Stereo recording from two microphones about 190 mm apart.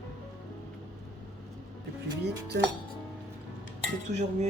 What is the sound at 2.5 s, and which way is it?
Speech, 60° right (ahead or behind).